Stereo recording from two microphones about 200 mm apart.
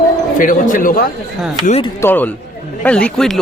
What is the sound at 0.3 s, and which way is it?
Speech, 40° left (ahead or behind).